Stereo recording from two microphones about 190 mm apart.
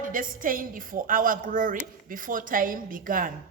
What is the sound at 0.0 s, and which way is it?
A woman's voice, 45° right (ahead or behind).